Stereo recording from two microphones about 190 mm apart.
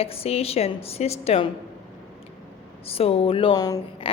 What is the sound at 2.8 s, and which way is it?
A woman's voice, 30° left (ahead or behind).